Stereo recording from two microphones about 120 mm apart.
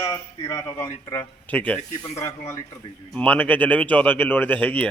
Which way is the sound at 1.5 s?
15° left (ahead or behind).